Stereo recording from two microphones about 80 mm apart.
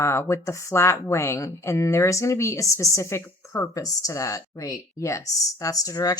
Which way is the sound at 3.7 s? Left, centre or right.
Left.